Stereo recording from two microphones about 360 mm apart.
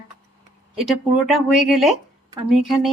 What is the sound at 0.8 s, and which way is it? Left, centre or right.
Speech, centre.